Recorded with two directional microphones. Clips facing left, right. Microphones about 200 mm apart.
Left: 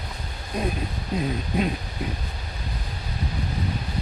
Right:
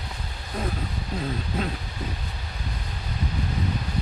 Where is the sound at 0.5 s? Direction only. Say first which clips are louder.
Left 3 dB; 15° left (ahead or behind).